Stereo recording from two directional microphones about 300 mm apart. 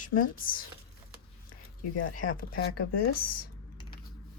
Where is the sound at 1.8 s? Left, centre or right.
Left.